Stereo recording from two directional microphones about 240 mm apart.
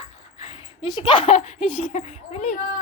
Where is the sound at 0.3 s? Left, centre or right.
Left.